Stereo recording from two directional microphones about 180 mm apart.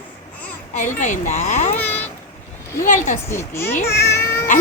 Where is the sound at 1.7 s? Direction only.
10° left (ahead or behind).